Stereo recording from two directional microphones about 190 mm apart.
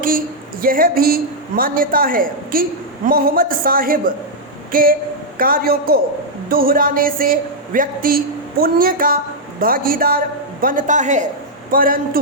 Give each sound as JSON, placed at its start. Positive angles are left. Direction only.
{"t": 0.6, "sound": "a woman's voice", "side_deg": -50}